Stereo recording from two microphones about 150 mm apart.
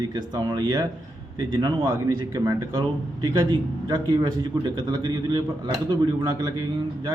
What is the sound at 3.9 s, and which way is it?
A man's voice, 30° right (ahead or behind).